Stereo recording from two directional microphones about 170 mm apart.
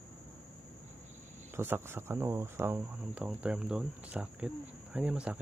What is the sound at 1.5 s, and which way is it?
Speech, 15° right (ahead or behind).